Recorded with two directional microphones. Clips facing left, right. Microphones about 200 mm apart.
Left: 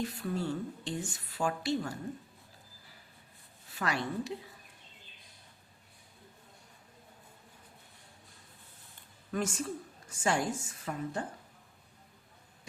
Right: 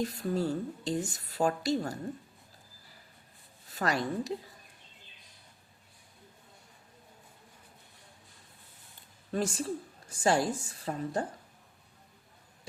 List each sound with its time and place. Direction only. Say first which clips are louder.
0.0 s speech: right 4 dB; 40° right (ahead or behind)
3.7 s speech: right 3 dB; 40° right (ahead or behind)
9.3 s speech: right 2 dB; 35° right (ahead or behind)